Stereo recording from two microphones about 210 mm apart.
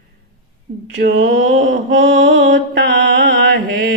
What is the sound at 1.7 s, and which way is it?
Mantra, 60° right (ahead or behind).